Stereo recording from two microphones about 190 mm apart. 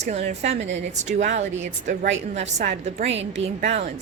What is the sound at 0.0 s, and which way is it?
A woman's voice, 35° right (ahead or behind).